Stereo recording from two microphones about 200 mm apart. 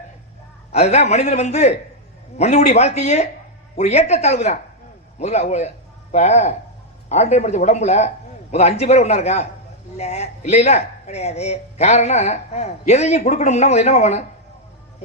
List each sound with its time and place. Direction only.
0.7 s a man's voice: 35° left (ahead or behind)